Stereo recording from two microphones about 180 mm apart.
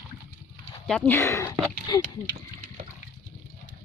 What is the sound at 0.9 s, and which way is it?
Speech, 10° left (ahead or behind).